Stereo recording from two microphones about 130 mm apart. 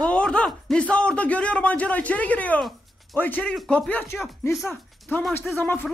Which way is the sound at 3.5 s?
Centre (ahead or behind).